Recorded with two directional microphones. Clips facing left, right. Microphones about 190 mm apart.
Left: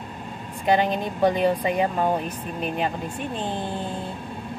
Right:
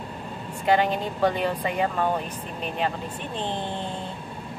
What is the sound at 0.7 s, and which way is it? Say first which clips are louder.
Speech: left 1 dB; 15° left (ahead or behind).